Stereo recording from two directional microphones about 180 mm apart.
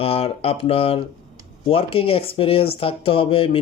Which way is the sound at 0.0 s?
35° left (ahead or behind).